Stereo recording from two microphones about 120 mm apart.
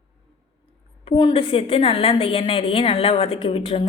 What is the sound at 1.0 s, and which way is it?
A woman's voice, 45° left (ahead or behind).